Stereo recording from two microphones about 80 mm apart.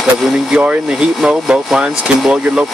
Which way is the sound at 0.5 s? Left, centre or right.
Centre.